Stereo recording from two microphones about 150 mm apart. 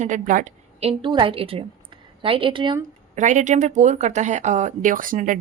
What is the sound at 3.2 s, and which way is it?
Speech, 55° right (ahead or behind).